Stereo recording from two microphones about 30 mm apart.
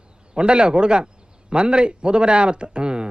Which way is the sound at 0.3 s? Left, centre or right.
Right.